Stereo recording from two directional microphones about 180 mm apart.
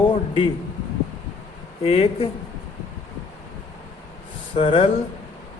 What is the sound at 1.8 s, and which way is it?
Speech, 30° left (ahead or behind).